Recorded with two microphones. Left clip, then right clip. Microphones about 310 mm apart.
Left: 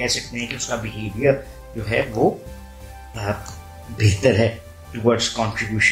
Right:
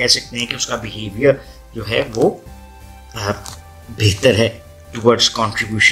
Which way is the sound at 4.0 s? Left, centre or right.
Right.